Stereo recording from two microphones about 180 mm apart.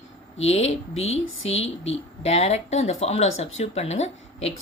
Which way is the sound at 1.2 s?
90° left.